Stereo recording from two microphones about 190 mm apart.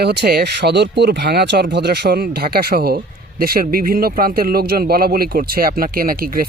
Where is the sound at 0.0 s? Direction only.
60° right (ahead or behind).